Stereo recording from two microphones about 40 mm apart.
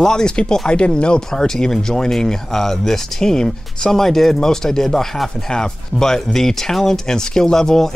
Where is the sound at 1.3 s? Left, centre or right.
Centre.